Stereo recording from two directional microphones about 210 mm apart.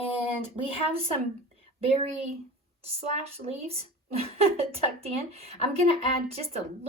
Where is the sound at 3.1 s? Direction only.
30° right (ahead or behind).